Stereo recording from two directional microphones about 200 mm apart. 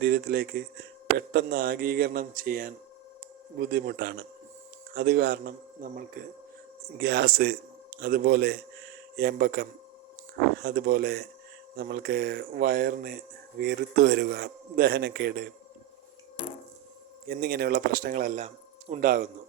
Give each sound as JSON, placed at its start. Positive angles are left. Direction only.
{"t": 0.0, "sound": "a man's voice", "side_deg": -50}
{"t": 17.2, "sound": "speech", "side_deg": -50}